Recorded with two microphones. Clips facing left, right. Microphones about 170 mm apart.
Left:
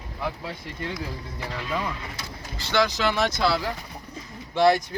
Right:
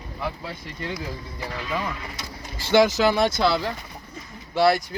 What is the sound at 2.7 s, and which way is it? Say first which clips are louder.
Speech: right 6 dB; 45° right (ahead or behind).